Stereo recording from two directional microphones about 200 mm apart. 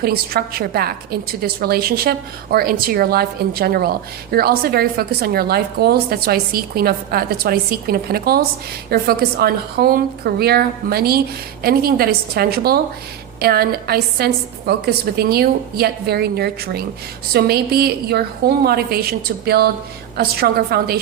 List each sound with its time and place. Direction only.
0.0 s a woman's voice: 50° right (ahead or behind)